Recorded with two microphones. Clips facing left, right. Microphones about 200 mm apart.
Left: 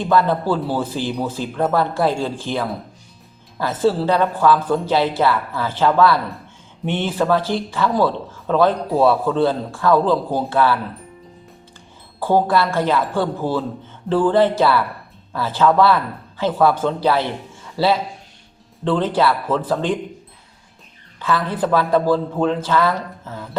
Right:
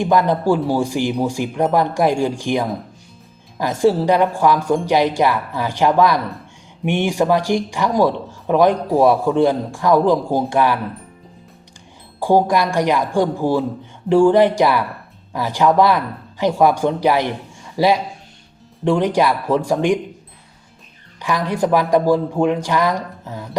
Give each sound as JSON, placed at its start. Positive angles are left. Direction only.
{"t": 0.0, "sound": "speech", "side_deg": -15}
{"t": 12.2, "sound": "speech", "side_deg": -15}
{"t": 21.2, "sound": "speech", "side_deg": -15}